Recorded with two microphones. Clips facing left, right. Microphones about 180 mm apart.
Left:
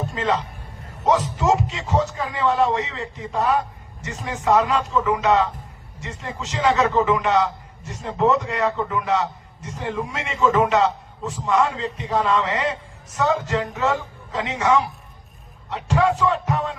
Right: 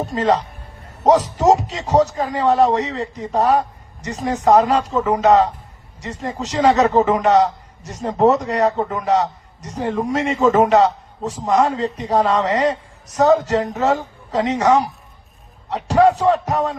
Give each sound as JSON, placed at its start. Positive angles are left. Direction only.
{"t": 0.0, "sound": "a man's voice", "side_deg": -40}